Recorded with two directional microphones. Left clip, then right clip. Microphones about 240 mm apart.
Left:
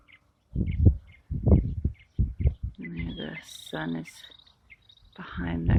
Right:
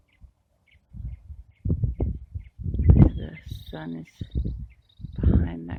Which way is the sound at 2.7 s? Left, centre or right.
Centre.